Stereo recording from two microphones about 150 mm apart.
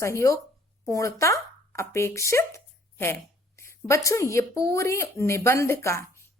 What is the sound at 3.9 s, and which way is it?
Speech, 20° left (ahead or behind).